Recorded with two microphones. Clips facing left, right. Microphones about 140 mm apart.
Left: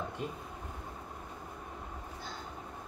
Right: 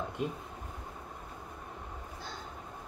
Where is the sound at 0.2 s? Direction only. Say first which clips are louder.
Right 7 dB; 20° right (ahead or behind).